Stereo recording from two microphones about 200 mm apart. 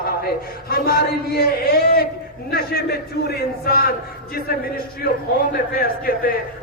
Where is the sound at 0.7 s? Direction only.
50° left (ahead or behind).